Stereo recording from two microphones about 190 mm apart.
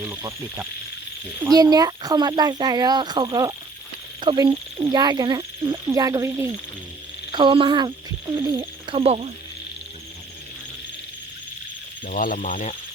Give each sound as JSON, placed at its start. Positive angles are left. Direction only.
{"t": 0.2, "sound": "speech", "side_deg": -15}
{"t": 7.3, "sound": "speech", "side_deg": -25}
{"t": 8.4, "sound": "speech", "side_deg": -15}
{"t": 8.9, "sound": "speech", "side_deg": -30}
{"t": 12.0, "sound": "speech", "side_deg": 45}